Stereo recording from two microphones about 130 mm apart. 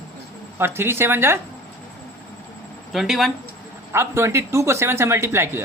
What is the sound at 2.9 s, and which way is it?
Speech, centre (ahead or behind).